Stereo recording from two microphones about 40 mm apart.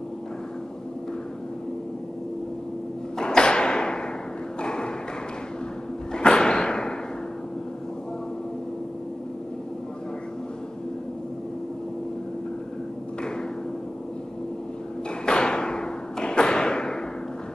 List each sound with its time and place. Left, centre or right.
3.2 s thump: left
4.6 s a sound: left
6.1 s thump: left
15.2 s thump: left